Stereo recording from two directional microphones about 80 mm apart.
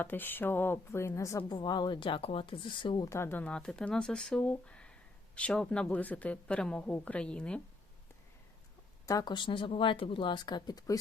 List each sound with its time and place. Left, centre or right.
0.0 s a woman's voice: left
1.5 s speech: left
3.1 s speech: left
3.4 s speech: centre
9.2 s speech: left